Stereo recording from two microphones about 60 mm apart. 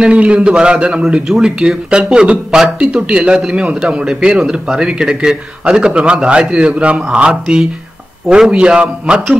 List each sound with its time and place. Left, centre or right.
0.0 s speech: centre
1.2 s speech: centre
1.6 s speech: centre